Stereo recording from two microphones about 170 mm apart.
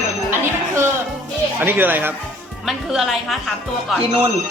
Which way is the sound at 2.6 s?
Centre (ahead or behind).